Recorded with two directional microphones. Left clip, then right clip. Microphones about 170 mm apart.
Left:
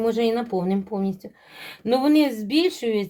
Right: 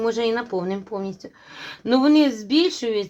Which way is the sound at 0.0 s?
20° right (ahead or behind).